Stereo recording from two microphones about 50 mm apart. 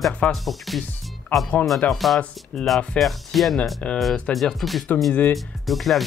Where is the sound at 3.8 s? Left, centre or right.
Centre.